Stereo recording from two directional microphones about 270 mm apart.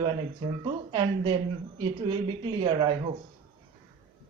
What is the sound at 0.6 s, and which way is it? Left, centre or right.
A woman's voice, centre.